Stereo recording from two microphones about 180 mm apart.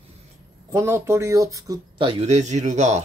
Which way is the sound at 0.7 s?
15° right (ahead or behind).